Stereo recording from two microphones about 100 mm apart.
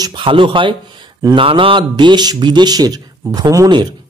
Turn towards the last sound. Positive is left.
turn(degrees=-40)  # may be behind; listen again after turning